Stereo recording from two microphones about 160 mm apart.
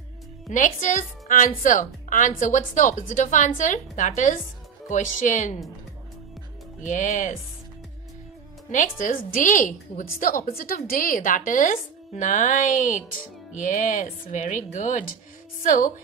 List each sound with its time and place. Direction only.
0.5 s a woman's voice: 55° left (ahead or behind)
6.8 s a woman's voice: 50° left (ahead or behind)
8.7 s a woman's voice: 55° left (ahead or behind)